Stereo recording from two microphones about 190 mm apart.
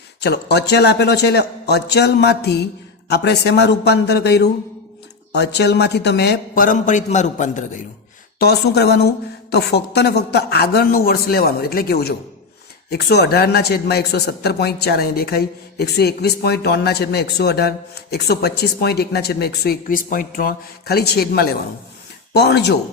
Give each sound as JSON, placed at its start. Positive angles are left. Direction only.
{"t": 0.2, "sound": "a man's voice", "side_deg": 60}
{"t": 8.4, "sound": "a man's voice", "side_deg": 60}